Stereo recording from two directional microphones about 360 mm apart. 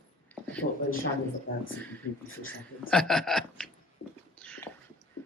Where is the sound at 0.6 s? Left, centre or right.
Left.